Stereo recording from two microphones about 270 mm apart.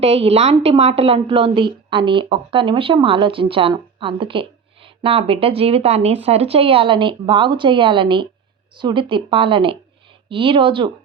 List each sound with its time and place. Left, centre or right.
0.0 s a woman's voice: right